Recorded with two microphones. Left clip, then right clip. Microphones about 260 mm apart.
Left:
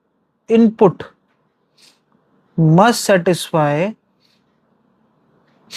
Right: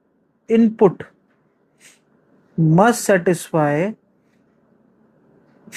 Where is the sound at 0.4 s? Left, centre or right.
Left.